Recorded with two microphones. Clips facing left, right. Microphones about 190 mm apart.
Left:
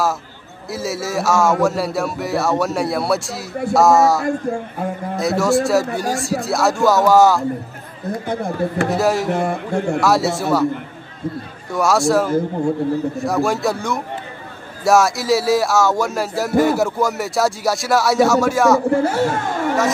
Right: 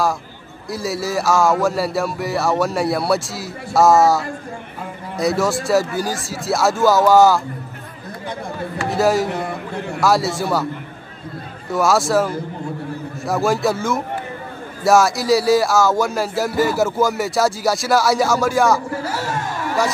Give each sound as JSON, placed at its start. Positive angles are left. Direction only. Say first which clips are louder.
{"t": 0.7, "sound": "speech", "louder": "right 1 dB", "side_deg": 0}
{"t": 8.1, "sound": "speech", "louder": "left 6 dB", "side_deg": 50}
{"t": 8.9, "sound": "speech", "louder": "right 4 dB", "side_deg": 0}
{"t": 9.3, "sound": "speech", "louder": "left 5 dB", "side_deg": 50}
{"t": 9.9, "sound": "speech", "louder": "right 2 dB", "side_deg": 0}
{"t": 11.7, "sound": "speech", "louder": "left 1 dB", "side_deg": 0}
{"t": 18.9, "sound": "speech", "louder": "left 8 dB", "side_deg": 55}